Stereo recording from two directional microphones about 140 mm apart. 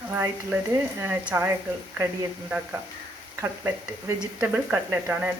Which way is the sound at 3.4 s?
20° right (ahead or behind).